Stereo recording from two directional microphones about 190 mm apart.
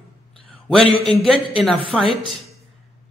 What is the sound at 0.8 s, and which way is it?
Speech, 30° left (ahead or behind).